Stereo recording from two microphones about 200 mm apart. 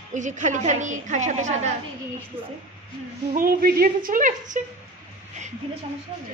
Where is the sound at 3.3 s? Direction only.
45° right (ahead or behind).